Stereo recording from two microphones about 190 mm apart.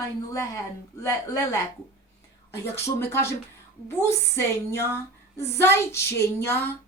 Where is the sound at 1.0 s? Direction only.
15° left (ahead or behind).